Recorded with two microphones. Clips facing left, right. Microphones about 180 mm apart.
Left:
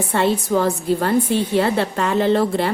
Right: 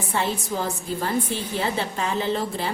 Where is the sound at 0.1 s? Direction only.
65° left (ahead or behind).